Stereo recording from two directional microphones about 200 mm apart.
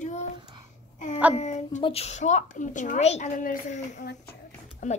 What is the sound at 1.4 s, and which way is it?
Speech, 35° left (ahead or behind).